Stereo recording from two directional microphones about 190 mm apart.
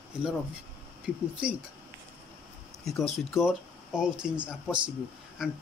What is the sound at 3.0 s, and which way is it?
Speech, 5° right (ahead or behind).